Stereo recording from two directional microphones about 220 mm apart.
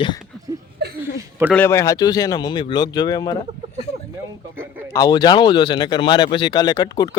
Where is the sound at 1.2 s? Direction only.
10° right (ahead or behind).